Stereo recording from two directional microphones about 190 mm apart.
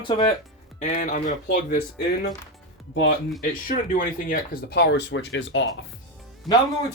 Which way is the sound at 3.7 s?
45° left (ahead or behind).